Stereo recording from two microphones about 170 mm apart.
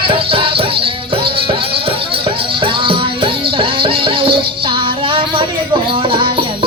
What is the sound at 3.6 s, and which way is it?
Music, 30° right (ahead or behind).